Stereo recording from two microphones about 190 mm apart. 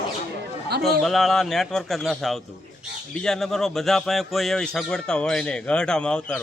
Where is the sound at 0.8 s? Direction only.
Centre (ahead or behind).